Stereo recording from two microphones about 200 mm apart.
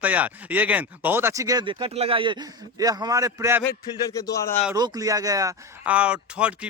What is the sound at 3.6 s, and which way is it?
Speech, 15° left (ahead or behind).